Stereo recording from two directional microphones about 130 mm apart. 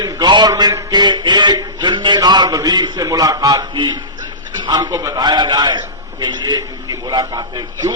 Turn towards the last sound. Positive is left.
turn(degrees=-30)  # may be behind; listen again after turning